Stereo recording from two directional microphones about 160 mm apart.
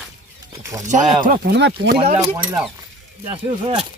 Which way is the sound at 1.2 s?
75° right (ahead or behind).